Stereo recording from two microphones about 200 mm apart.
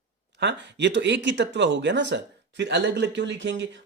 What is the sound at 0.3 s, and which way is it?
Speech, 60° right (ahead or behind).